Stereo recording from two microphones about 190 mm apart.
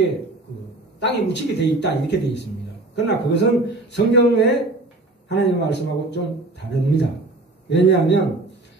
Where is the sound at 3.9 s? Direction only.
65° left (ahead or behind).